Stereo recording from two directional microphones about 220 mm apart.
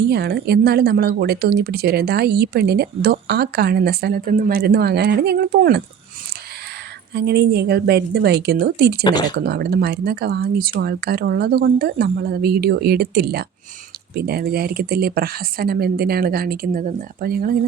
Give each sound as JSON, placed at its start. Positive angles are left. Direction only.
{"t": 0.1, "sound": "speech", "side_deg": -45}
{"t": 7.1, "sound": "speech", "side_deg": -50}